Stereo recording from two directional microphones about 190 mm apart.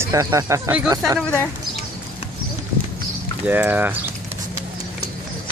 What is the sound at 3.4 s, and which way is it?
Speech, 10° right (ahead or behind).